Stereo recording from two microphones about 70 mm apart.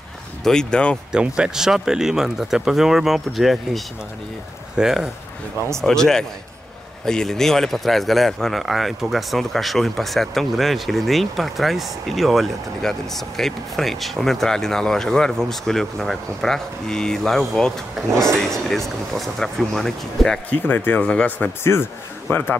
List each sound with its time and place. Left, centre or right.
0.4 s speech: centre
1.1 s speech: centre
5.8 s speech: centre
20.4 s speech: left
21.7 s a man's voice: left